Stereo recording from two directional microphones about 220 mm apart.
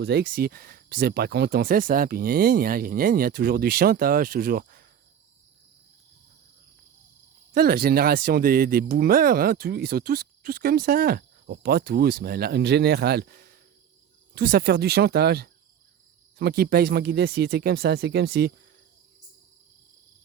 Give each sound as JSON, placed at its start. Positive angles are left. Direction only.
{"t": 0.0, "sound": "speech", "side_deg": -45}
{"t": 7.5, "sound": "speech", "side_deg": -45}